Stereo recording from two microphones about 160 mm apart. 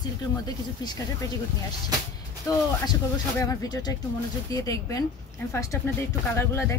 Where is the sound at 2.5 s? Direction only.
20° left (ahead or behind).